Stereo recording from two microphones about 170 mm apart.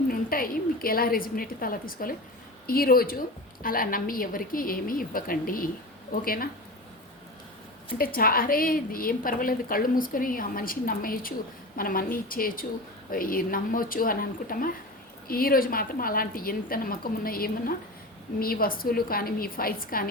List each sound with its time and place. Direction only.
0.1 s a woman's voice: 60° left (ahead or behind)
7.9 s a woman's voice: 60° left (ahead or behind)